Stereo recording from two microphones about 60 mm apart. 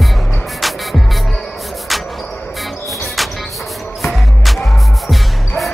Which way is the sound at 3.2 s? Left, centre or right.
Centre.